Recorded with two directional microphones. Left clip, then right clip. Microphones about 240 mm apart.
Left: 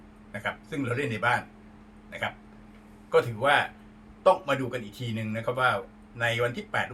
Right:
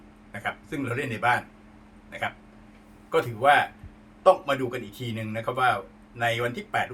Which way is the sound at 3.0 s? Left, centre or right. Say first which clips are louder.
Right 2 dB; centre.